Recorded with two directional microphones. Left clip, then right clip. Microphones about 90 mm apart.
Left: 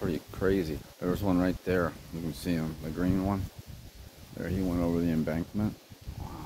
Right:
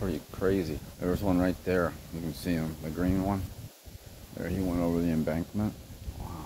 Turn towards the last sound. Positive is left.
turn(degrees=10)  # may be behind; listen again after turning